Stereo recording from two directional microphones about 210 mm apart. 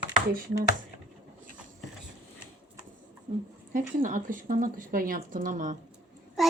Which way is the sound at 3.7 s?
40° right (ahead or behind).